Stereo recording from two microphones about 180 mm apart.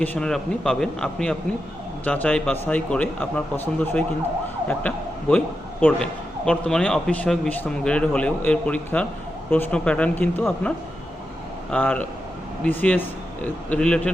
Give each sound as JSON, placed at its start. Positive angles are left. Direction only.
{"t": 0.0, "sound": "a man's voice", "side_deg": 5}
{"t": 11.7, "sound": "a man's voice", "side_deg": 5}